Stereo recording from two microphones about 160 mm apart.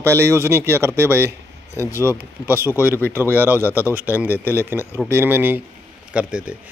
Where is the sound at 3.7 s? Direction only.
15° left (ahead or behind).